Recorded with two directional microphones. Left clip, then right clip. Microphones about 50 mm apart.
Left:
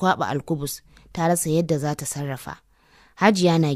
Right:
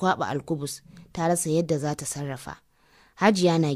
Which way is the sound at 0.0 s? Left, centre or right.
Left.